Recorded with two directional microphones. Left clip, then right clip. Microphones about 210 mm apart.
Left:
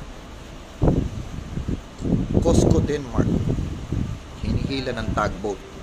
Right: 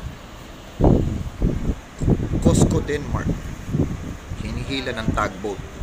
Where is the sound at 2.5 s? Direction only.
5° left (ahead or behind).